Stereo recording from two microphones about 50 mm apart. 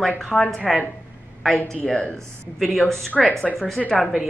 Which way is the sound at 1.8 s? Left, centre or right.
Centre.